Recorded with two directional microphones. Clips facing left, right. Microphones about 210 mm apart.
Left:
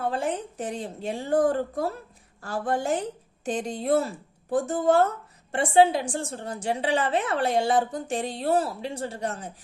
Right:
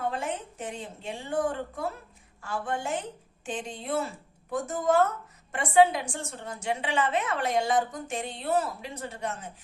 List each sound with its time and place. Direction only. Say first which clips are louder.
0.0 s a woman's voice: left 4 dB; 35° left (ahead or behind)